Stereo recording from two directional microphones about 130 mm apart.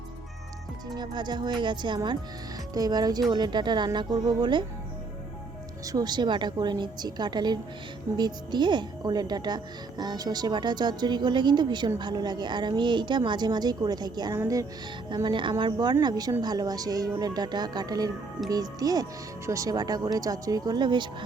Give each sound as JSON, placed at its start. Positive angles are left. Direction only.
{"t": 0.9, "sound": "a woman's voice", "side_deg": -35}
{"t": 5.8, "sound": "a woman's voice", "side_deg": -30}
{"t": 15.1, "sound": "a woman's voice", "side_deg": -40}